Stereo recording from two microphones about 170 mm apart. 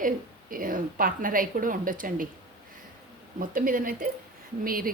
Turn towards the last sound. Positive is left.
turn(degrees=-55)  # may be behind; listen again after turning